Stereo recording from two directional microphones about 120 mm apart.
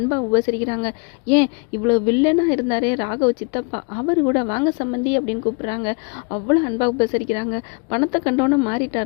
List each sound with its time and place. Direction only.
0.1 s a woman's voice: 35° left (ahead or behind)